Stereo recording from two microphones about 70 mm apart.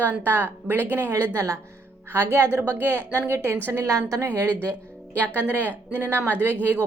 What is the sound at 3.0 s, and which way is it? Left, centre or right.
Speech, left.